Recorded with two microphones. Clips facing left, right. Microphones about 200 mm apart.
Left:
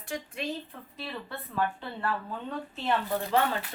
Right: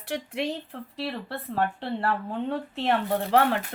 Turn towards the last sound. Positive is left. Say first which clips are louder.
# right 5 dB
turn(degrees=-70)  # may be behind; listen again after turning